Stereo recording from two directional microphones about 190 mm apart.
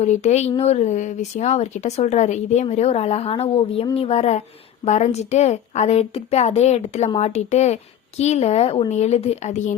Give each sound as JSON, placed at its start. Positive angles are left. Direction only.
{"t": 0.0, "sound": "a woman's voice", "side_deg": 35}